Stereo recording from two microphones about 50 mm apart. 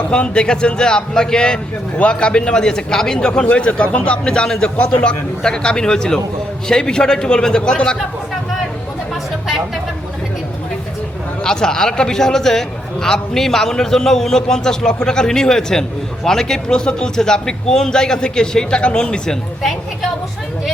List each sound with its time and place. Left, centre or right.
0.1 s a man's voice: centre
11.4 s a man's voice: centre